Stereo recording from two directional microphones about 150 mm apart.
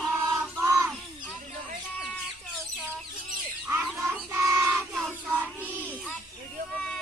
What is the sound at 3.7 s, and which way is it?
Music, 15° right (ahead or behind).